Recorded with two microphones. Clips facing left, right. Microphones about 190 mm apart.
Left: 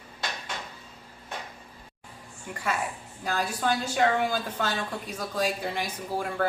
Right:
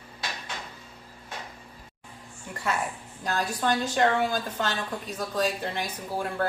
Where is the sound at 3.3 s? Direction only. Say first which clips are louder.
Right 1 dB; 10° left (ahead or behind).